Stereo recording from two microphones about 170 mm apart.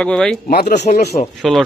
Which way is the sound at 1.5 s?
Centre (ahead or behind).